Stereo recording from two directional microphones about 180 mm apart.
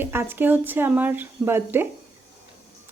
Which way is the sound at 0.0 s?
10° right (ahead or behind).